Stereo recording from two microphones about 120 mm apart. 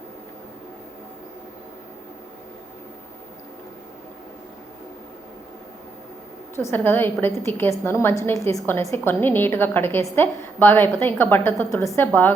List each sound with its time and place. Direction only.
6.6 s a woman's voice: 20° left (ahead or behind)